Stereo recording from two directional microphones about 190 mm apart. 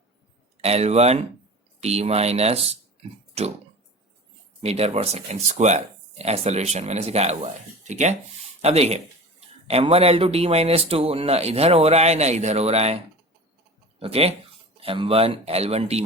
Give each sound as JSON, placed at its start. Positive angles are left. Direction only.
{"t": 0.6, "sound": "speech", "side_deg": -35}
{"t": 4.6, "sound": "speech", "side_deg": -35}
{"t": 14.0, "sound": "speech", "side_deg": -30}